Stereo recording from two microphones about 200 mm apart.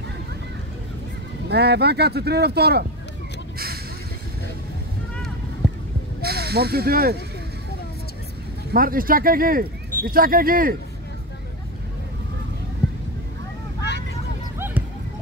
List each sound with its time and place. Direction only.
1.5 s speech: 55° right (ahead or behind)
3.5 s a sound: 50° right (ahead or behind)
6.2 s speech: 55° right (ahead or behind)
8.7 s speech: 45° right (ahead or behind)